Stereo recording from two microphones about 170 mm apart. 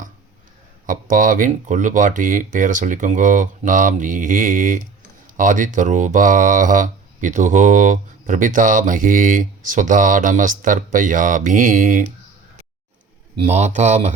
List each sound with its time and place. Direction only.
0.9 s speech: 50° right (ahead or behind)
13.5 s speech: 40° right (ahead or behind)